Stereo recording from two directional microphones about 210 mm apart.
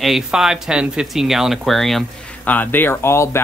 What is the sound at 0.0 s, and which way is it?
Speech, centre (ahead or behind).